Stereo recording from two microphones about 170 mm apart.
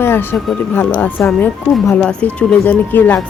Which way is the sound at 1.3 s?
5° left (ahead or behind).